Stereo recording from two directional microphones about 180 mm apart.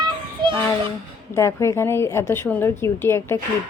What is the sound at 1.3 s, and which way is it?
A woman's voice, 15° left (ahead or behind).